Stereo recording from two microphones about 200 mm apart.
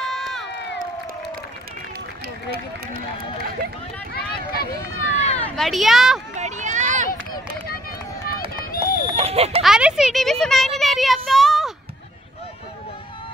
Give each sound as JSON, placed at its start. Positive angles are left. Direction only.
{"t": 0.1, "sound": "crowd", "side_deg": 0}
{"t": 5.0, "sound": "run", "side_deg": -65}
{"t": 5.4, "sound": "speech", "side_deg": 0}
{"t": 6.3, "sound": "a sound", "side_deg": -35}
{"t": 8.4, "sound": "run", "side_deg": -30}
{"t": 9.6, "sound": "speech", "side_deg": -5}